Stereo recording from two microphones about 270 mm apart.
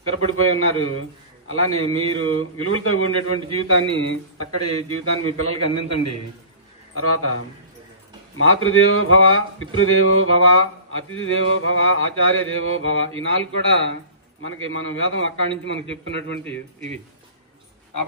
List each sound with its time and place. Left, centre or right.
0.0 s mantra: left
3.4 s a man's voice: left
6.9 s a man's voice: left
8.4 s mantra: left